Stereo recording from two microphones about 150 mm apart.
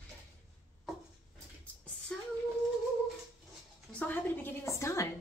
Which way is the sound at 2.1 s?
5° left (ahead or behind).